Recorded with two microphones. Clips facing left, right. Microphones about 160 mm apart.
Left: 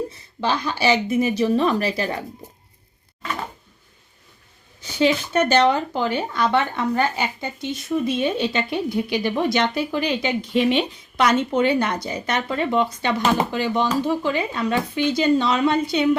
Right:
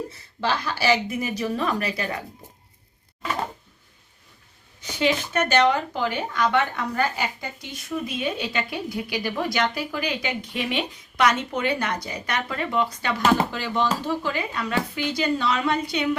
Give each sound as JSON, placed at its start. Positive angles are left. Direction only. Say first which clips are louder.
{"t": 0.4, "sound": "speech", "louder": "left 2 dB", "side_deg": 20}
{"t": 4.8, "sound": "speech", "louder": "left 4 dB", "side_deg": 30}